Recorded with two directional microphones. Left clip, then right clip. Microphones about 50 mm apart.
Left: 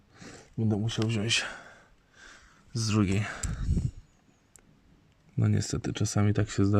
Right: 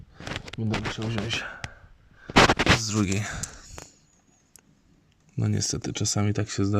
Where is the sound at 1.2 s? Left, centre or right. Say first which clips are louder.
Left 4 dB; centre.